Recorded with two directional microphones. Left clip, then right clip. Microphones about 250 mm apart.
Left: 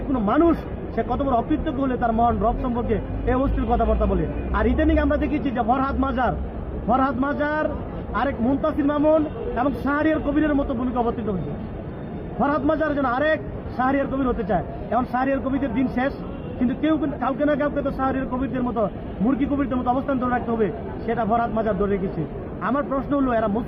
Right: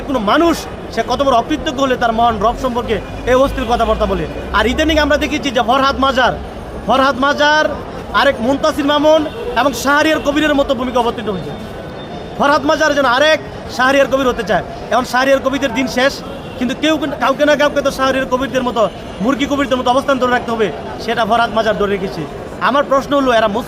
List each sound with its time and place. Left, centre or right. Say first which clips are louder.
0.1 s a man's voice: right 7 dB; right
12.4 s a man's voice: right 9 dB; right